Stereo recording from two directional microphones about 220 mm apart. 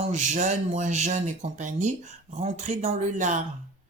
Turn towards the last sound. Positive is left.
turn(degrees=-35)  # may be behind; listen again after turning